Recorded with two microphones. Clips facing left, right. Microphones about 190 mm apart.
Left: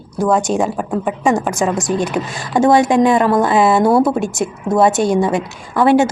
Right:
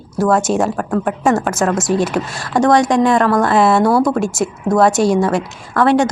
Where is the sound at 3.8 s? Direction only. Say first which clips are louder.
Left 1 dB; 20° left (ahead or behind).